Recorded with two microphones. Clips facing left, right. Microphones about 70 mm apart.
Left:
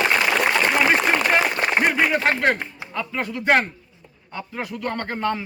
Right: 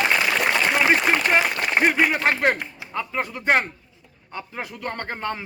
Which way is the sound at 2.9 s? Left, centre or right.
Right.